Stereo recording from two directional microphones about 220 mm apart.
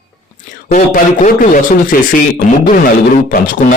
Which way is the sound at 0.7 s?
35° left (ahead or behind).